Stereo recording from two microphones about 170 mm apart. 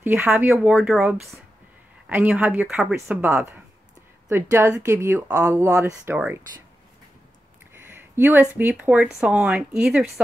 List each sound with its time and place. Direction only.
0.0 s speech: 10° right (ahead or behind)
7.7 s a sound: 10° right (ahead or behind)
8.5 s speech: 10° right (ahead or behind)